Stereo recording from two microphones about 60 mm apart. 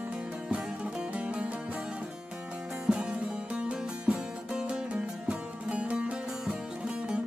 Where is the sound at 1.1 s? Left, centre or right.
Centre.